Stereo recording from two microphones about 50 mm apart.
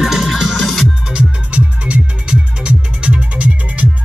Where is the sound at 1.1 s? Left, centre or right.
Right.